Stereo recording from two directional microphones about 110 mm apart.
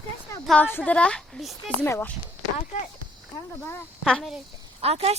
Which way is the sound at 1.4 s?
Centre (ahead or behind).